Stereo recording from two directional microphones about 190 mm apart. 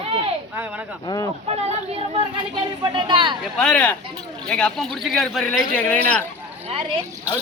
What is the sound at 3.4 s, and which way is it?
A man's voice, 5° left (ahead or behind).